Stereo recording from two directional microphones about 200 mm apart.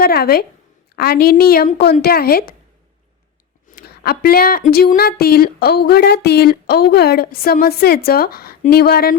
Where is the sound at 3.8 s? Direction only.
50° left (ahead or behind).